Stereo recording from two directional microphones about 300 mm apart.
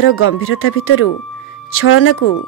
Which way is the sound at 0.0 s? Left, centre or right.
Left.